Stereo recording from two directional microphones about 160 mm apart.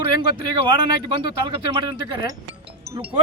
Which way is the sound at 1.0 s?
30° right (ahead or behind).